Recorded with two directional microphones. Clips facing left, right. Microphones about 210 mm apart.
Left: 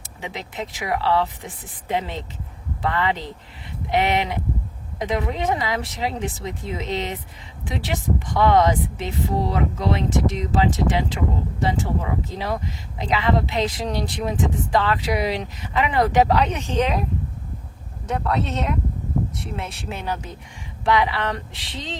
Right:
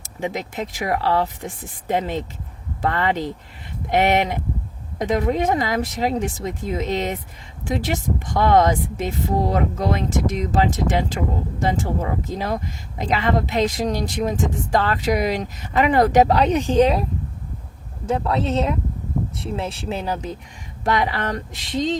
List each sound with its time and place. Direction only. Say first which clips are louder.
0.0 s speech: right 7 dB; 45° right (ahead or behind)
20.8 s speech: left 1 dB; 45° right (ahead or behind)